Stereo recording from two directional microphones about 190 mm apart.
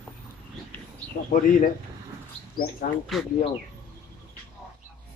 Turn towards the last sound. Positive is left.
turn(degrees=0)  # may be behind; listen again after turning